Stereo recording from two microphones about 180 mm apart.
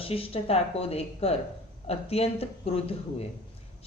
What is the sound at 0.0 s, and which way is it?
Speech, 30° left (ahead or behind).